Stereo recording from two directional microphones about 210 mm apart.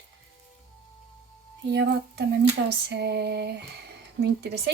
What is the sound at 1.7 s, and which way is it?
Speech, 55° right (ahead or behind).